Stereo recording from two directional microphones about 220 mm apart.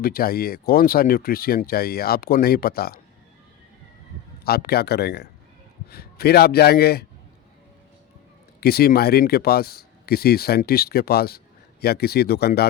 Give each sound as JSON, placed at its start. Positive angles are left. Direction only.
{"t": 0.0, "sound": "speech", "side_deg": 40}
{"t": 4.4, "sound": "speech", "side_deg": 45}
{"t": 8.6, "sound": "speech", "side_deg": 45}